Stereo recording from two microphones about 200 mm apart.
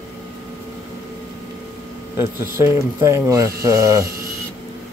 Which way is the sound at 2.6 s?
15° right (ahead or behind).